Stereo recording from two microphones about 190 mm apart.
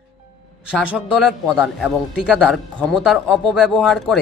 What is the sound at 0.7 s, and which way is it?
Speech, 5° right (ahead or behind).